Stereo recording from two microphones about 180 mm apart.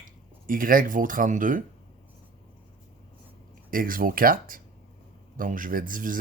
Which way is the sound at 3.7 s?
50° right (ahead or behind).